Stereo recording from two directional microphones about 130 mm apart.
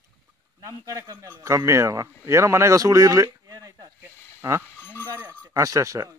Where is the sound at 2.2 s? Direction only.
20° right (ahead or behind).